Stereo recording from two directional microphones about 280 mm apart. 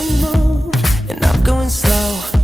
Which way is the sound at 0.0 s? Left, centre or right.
Centre.